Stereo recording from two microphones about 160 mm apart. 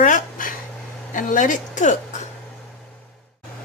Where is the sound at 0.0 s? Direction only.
55° left (ahead or behind).